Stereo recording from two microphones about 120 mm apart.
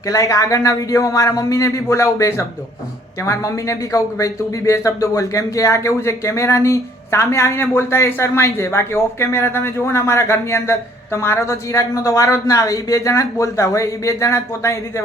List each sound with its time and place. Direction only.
0.1 s speech: 30° left (ahead or behind)